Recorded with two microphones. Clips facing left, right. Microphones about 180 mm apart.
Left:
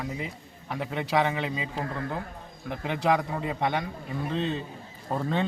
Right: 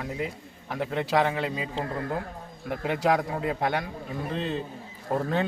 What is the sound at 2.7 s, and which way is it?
A man's voice, 5° right (ahead or behind).